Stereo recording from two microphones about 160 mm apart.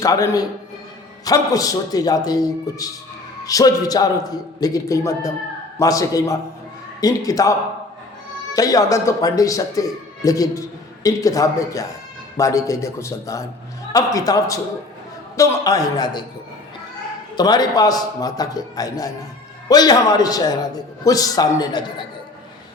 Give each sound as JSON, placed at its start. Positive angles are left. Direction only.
{"t": 0.0, "sound": "a man's voice", "side_deg": 20}
{"t": 8.5, "sound": "a man's voice", "side_deg": 20}
{"t": 17.3, "sound": "a man's voice", "side_deg": 25}